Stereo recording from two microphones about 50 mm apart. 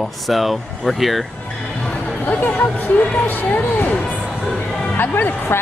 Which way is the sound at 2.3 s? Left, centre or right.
Left.